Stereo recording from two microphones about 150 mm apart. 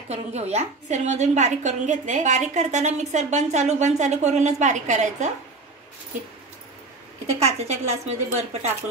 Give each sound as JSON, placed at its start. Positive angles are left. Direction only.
{"t": 0.1, "sound": "a woman's voice", "side_deg": -45}
{"t": 7.2, "sound": "a woman's voice", "side_deg": -45}